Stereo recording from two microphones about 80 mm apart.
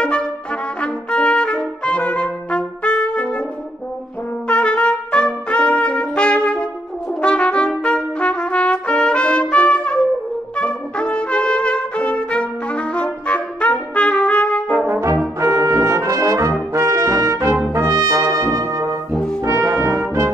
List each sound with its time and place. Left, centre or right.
0.0 s brass instrument: centre
0.7 s trumpet: centre
4.5 s trumpet: centre
15.4 s brass instrument: right